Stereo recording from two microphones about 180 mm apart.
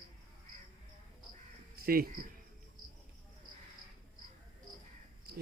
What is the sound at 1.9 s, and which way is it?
Speech, 55° right (ahead or behind).